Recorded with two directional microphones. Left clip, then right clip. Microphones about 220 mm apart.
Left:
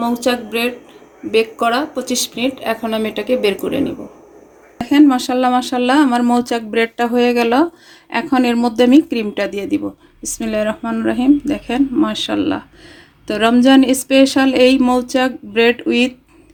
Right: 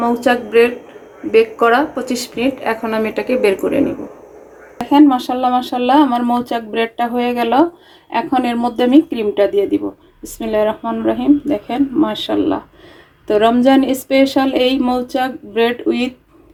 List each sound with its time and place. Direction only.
0.0 s speech: 40° left (ahead or behind)
4.9 s speech: 35° left (ahead or behind)